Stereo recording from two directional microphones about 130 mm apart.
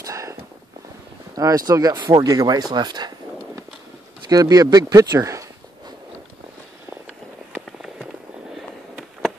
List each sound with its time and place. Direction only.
0.0 s a sound: 25° right (ahead or behind)
1.3 s speech: 25° right (ahead or behind)
4.3 s speech: 30° right (ahead or behind)
7.5 s fireworks: 5° right (ahead or behind)